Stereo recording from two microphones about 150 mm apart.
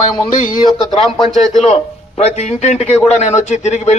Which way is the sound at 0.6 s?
30° left (ahead or behind).